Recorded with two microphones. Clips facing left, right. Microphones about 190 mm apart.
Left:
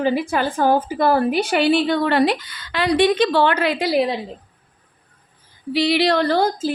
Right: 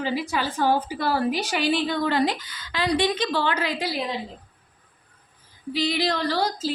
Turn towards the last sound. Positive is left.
turn(degrees=50)  # may be behind; listen again after turning